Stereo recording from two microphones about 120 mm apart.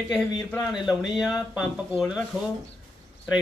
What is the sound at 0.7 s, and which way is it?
Speech, centre (ahead or behind).